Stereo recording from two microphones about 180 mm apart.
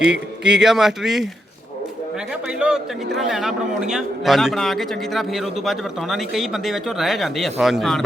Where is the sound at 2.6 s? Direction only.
5° right (ahead or behind).